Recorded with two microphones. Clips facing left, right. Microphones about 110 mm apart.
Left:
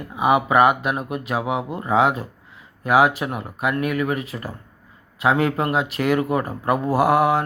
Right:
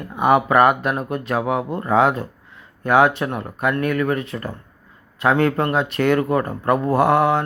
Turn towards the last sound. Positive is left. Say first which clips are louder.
# right 1 dB
turn(degrees=30)  # may be behind; listen again after turning